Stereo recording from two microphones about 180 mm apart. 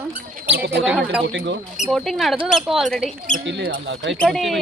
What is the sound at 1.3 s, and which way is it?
Speech, 90° right.